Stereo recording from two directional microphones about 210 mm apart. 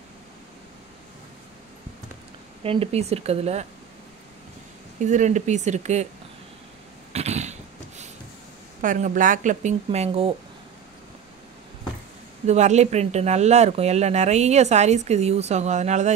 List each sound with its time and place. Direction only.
2.6 s speech: 25° right (ahead or behind)
5.0 s speech: 35° right (ahead or behind)
7.1 s a sound: 30° right (ahead or behind)
8.8 s speech: 40° right (ahead or behind)
12.4 s speech: 35° right (ahead or behind)